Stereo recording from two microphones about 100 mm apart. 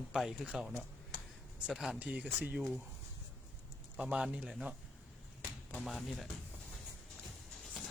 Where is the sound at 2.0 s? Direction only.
15° right (ahead or behind).